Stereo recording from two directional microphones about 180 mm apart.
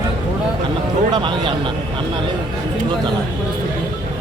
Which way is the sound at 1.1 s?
25° right (ahead or behind).